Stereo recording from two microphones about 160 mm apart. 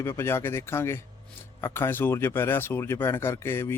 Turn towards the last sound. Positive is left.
turn(degrees=15)  # may be behind; listen again after turning